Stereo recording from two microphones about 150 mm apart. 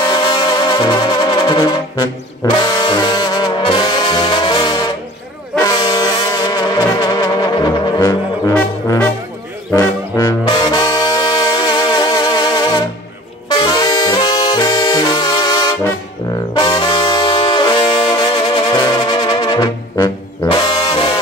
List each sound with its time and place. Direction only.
0.0 s music: 30° left (ahead or behind)
2.6 s brass instrument: 30° left (ahead or behind)
9.7 s brass instrument: 25° left (ahead or behind)
13.5 s music: 30° left (ahead or behind)
16.5 s brass instrument: 25° left (ahead or behind)